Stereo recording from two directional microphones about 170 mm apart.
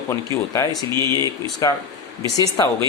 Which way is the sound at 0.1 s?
20° left (ahead or behind).